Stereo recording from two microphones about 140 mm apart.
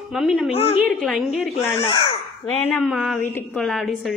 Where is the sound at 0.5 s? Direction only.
45° left (ahead or behind).